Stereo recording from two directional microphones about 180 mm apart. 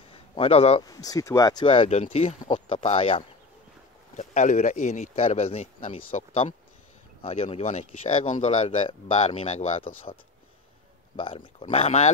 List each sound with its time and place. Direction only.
0.1 s a sound: 35° left (ahead or behind)
0.8 s speech: 20° left (ahead or behind)
4.2 s speech: 40° left (ahead or behind)
11.1 s speech: 30° left (ahead or behind)